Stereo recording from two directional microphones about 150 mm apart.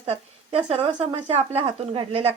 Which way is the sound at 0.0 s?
40° right (ahead or behind).